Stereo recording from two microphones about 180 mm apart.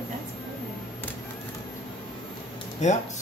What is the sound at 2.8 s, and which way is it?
Speech, 40° left (ahead or behind).